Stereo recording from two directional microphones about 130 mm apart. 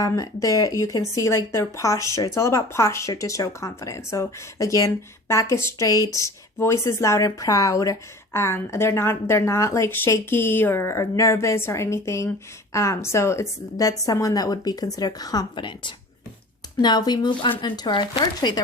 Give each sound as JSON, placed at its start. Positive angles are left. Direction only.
{"t": 0.0, "sound": "speech", "side_deg": 25}